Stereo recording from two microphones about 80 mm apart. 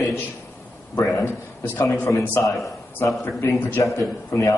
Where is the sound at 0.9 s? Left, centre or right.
Left.